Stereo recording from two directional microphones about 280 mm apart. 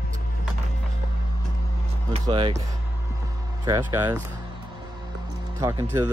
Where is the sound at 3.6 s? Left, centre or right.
Centre.